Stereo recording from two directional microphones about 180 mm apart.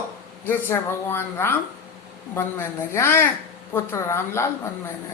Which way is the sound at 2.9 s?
15° left (ahead or behind).